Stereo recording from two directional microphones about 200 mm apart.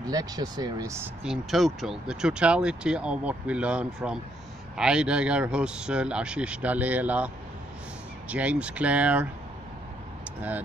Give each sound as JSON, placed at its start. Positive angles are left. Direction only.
{"t": 0.0, "sound": "speech", "side_deg": -20}
{"t": 8.3, "sound": "speech", "side_deg": -5}